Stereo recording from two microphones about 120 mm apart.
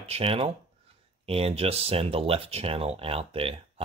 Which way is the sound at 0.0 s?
55° right (ahead or behind).